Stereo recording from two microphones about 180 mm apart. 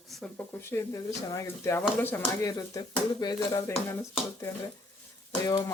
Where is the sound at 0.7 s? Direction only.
15° left (ahead or behind).